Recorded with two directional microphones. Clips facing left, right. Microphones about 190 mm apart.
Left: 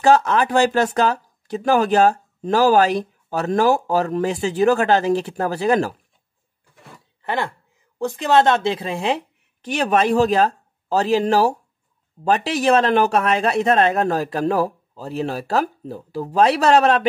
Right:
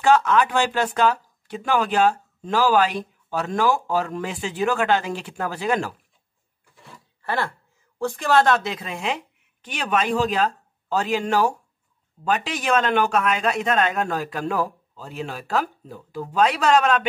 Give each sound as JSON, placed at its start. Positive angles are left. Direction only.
{"t": 0.0, "sound": "speech", "side_deg": 35}
{"t": 7.2, "sound": "speech", "side_deg": 20}